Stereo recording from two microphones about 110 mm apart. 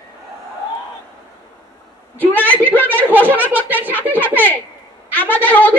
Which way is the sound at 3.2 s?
15° right (ahead or behind).